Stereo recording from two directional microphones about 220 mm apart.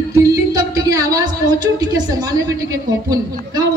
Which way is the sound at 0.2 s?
15° right (ahead or behind).